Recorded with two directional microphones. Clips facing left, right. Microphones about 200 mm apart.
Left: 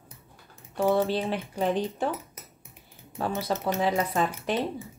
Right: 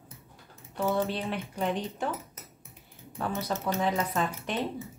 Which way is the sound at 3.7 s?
35° left (ahead or behind).